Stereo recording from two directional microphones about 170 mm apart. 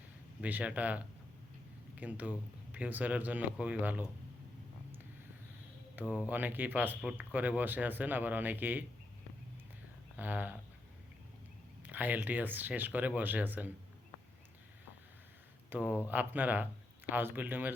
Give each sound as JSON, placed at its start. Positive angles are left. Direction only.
{"t": 0.4, "sound": "speech", "side_deg": -10}
{"t": 6.0, "sound": "speech", "side_deg": -10}
{"t": 10.2, "sound": "speech", "side_deg": -10}
{"t": 11.8, "sound": "speech", "side_deg": -10}
{"t": 15.7, "sound": "speech", "side_deg": -10}